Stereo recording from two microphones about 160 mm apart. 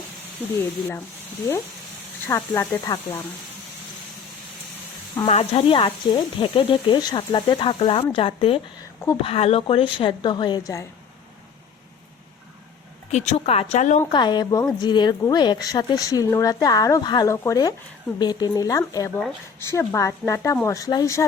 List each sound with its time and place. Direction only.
2.2 s a woman's voice: 20° left (ahead or behind)
5.2 s speech: 40° left (ahead or behind); by 10.8 s 20° left (ahead or behind)
13.1 s speech: 45° left (ahead or behind)
14.1 s a woman's voice: 30° left (ahead or behind)